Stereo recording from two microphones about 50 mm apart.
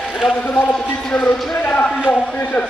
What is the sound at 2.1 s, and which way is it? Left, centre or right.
Speech, left.